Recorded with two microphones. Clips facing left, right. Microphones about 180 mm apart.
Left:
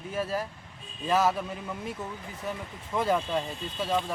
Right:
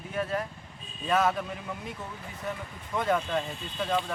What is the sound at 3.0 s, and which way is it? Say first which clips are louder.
Speech: left 1 dB; 10° left (ahead or behind).